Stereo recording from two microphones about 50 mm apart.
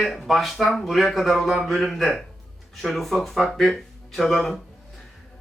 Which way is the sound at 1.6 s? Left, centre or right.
Centre.